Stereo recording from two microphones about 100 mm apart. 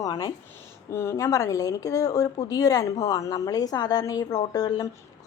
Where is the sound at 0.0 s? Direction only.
40° left (ahead or behind).